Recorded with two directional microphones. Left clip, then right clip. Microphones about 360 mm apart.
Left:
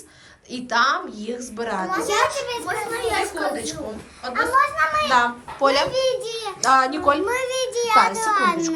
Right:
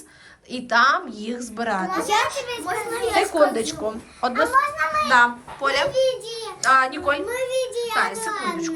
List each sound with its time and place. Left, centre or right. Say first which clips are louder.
0.5 s a child's voice: right 2 dB; centre